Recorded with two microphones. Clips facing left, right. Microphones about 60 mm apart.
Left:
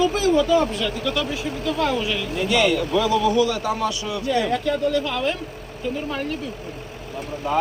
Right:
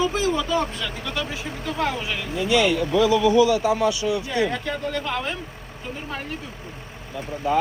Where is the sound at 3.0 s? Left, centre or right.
Centre.